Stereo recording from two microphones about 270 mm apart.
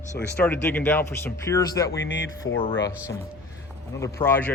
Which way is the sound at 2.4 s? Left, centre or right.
Left.